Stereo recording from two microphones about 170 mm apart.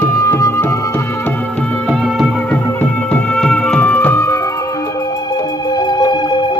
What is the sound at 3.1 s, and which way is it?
Music, 5° left (ahead or behind).